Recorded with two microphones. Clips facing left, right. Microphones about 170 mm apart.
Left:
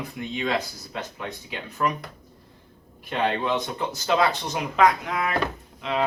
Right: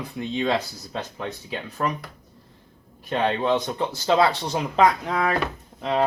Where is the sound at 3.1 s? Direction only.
30° right (ahead or behind).